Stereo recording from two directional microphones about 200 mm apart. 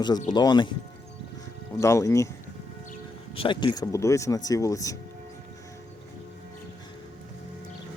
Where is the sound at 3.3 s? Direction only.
25° left (ahead or behind).